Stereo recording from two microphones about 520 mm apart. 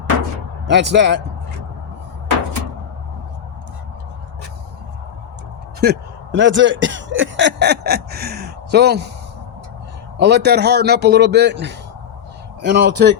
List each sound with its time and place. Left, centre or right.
0.7 s a man's voice: centre
5.8 s speech: centre
10.2 s a man's voice: centre